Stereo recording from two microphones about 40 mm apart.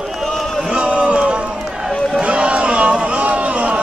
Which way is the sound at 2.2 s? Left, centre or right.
Right.